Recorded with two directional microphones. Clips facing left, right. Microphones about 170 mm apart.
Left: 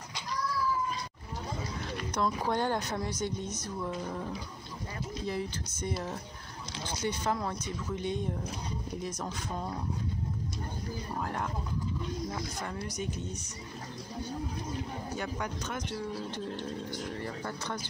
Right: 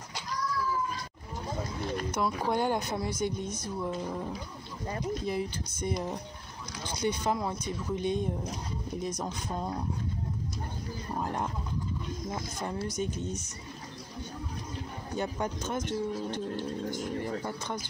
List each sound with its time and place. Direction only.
2.0 s a woman's voice: 10° right (ahead or behind)
5.2 s a woman's voice: 15° right (ahead or behind)
11.1 s speech: 20° right (ahead or behind)
15.1 s speech: 25° right (ahead or behind)
17.2 s a woman's voice: 15° right (ahead or behind)